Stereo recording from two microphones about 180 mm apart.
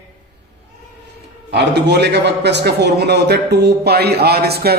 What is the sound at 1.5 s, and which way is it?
A man's voice, 70° right (ahead or behind).